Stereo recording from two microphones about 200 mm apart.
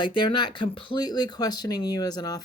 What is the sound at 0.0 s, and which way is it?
Speech, 25° left (ahead or behind).